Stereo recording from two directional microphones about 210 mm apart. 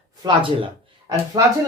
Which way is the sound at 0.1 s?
20° right (ahead or behind).